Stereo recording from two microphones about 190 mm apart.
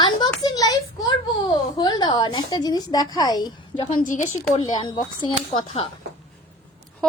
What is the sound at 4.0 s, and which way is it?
Speech, 40° left (ahead or behind).